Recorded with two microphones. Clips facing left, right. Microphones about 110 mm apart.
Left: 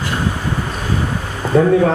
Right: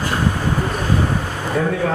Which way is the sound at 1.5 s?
30° left (ahead or behind).